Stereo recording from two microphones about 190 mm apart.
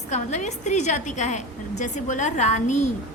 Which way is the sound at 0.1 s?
40° left (ahead or behind).